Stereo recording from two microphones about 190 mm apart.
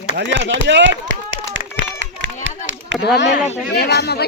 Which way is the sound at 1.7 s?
75° right (ahead or behind).